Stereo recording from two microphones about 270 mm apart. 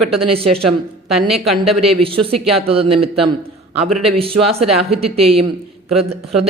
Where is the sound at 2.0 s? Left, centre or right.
Right.